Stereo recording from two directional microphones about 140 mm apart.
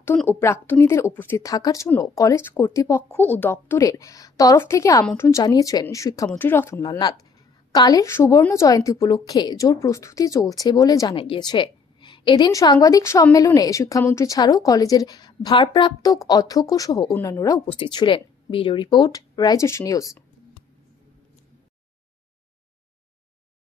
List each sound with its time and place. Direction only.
0.0 s a woman's voice: 15° left (ahead or behind)
6.8 s a woman's voice: 30° left (ahead or behind)
11.1 s a woman's voice: 35° left (ahead or behind)
17.6 s speech: 35° left (ahead or behind)